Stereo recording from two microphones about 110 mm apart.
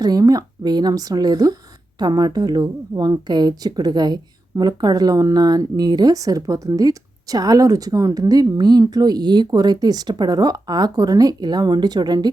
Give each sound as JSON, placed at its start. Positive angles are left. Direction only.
{"t": 0.0, "sound": "a woman's voice", "side_deg": -35}